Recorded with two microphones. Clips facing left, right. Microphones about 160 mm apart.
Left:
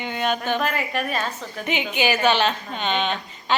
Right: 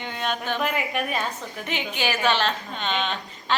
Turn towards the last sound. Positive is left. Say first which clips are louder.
# left 3 dB
turn(degrees=0)  # may be behind; listen again after turning